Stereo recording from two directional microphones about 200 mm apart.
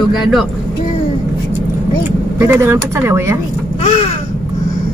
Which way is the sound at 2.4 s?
10° right (ahead or behind).